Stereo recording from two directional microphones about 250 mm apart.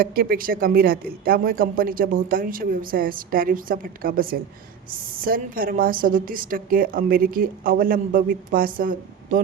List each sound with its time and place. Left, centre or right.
0.0 s a woman's voice: right